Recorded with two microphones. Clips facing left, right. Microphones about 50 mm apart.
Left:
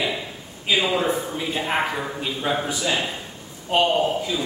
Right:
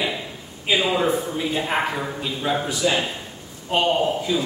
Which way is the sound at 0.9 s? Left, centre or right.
Centre.